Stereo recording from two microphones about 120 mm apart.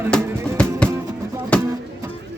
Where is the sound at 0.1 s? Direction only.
10° left (ahead or behind).